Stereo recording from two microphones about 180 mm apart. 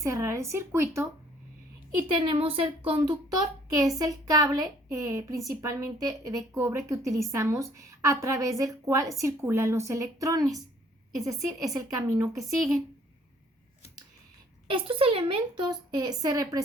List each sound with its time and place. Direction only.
0.0 s a woman's voice: 15° right (ahead or behind)
2.1 s a woman's voice: 30° right (ahead or behind)
12.4 s speech: centre (ahead or behind)
14.7 s a woman's voice: 30° right (ahead or behind)